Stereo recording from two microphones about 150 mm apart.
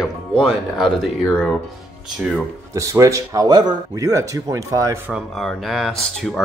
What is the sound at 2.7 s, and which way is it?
Speech, 20° right (ahead or behind).